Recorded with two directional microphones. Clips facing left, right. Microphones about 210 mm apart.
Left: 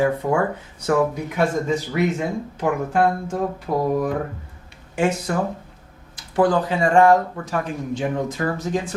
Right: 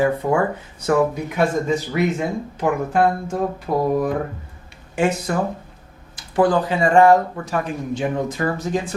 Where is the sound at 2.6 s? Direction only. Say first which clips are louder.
Right 1 dB; 20° right (ahead or behind).